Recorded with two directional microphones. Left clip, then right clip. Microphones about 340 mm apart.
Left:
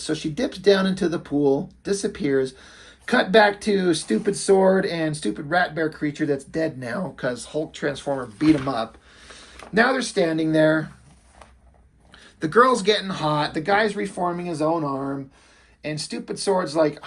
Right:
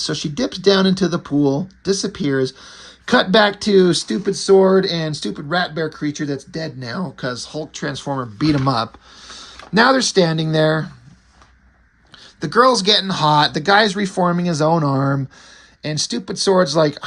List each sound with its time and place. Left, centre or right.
0.0 s speech: right
12.4 s speech: centre